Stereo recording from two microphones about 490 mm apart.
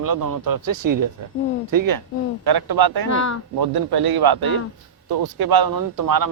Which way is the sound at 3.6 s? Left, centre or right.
Right.